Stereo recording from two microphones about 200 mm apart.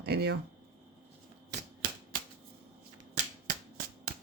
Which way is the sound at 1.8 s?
45° right (ahead or behind).